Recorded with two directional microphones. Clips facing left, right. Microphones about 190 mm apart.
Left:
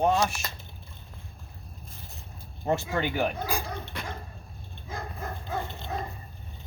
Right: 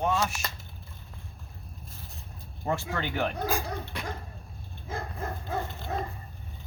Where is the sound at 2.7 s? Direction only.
20° left (ahead or behind).